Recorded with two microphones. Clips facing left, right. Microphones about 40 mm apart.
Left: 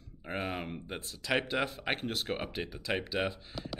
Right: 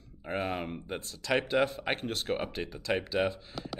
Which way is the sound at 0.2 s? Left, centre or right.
Centre.